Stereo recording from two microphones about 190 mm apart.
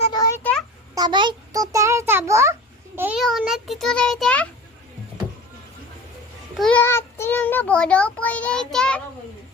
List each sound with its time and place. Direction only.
0.1 s a sound: 15° left (ahead or behind)
0.9 s a child's voice: 25° right (ahead or behind)
3.2 s a child's voice: centre (ahead or behind)
6.6 s child singing: 5° left (ahead or behind)